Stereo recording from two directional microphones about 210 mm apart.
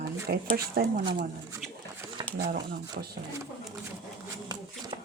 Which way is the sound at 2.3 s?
50° right (ahead or behind).